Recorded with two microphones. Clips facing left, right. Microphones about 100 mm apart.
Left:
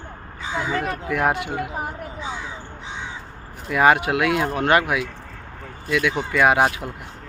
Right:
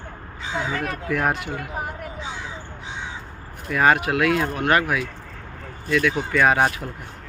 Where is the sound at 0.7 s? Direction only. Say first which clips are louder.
Left 1 dB; 20° left (ahead or behind).